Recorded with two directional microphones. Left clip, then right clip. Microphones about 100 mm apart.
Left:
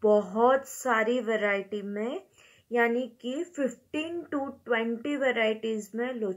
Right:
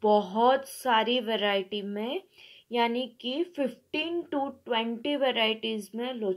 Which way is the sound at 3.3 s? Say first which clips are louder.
Right 2 dB; 50° right (ahead or behind).